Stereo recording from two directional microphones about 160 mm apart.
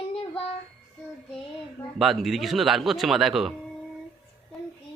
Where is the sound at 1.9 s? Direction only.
Centre (ahead or behind).